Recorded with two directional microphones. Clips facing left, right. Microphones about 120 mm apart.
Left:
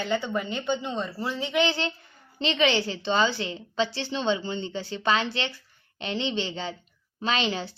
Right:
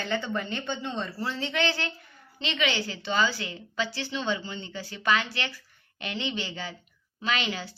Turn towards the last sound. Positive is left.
turn(degrees=30)  # may be behind; listen again after turning